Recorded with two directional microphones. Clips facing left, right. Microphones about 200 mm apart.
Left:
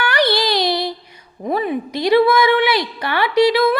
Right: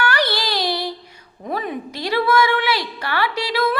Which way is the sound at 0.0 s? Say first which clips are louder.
Left 4 dB; 15° left (ahead or behind).